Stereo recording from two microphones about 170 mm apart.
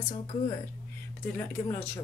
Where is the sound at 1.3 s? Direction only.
10° left (ahead or behind).